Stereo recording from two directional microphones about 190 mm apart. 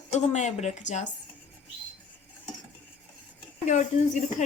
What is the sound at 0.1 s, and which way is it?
Speech, 35° left (ahead or behind).